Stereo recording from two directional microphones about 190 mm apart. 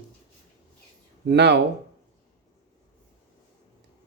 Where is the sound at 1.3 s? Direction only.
65° right (ahead or behind).